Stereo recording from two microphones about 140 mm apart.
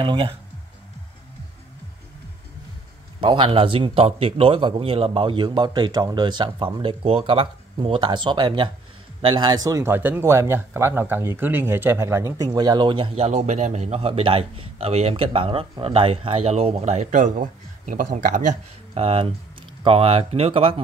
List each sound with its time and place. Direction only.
3.2 s speech: 40° right (ahead or behind); by 18.6 s 65° right (ahead or behind)
18.9 s speech: 45° right (ahead or behind)